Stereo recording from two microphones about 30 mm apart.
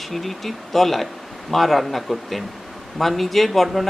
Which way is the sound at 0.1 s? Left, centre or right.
Centre.